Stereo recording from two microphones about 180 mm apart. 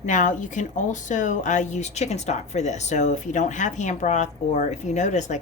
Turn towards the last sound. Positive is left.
turn(degrees=40)  # may be behind; listen again after turning